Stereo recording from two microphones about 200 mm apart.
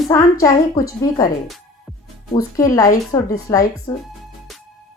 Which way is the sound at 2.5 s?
15° left (ahead or behind).